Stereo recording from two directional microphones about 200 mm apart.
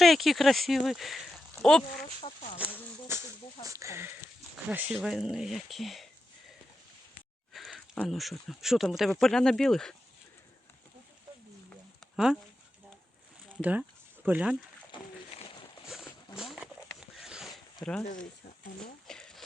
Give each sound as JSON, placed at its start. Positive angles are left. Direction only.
{"t": 0.0, "sound": "speech", "side_deg": 0}
{"t": 3.1, "sound": "speech", "side_deg": -15}
{"t": 7.5, "sound": "speech", "side_deg": 0}
{"t": 12.1, "sound": "speech", "side_deg": 0}
{"t": 13.5, "sound": "speech", "side_deg": -5}
{"t": 14.9, "sound": "a sound", "side_deg": 25}
{"t": 15.9, "sound": "a sound", "side_deg": 0}
{"t": 17.8, "sound": "speech", "side_deg": 10}
{"t": 18.8, "sound": "a sound", "side_deg": 5}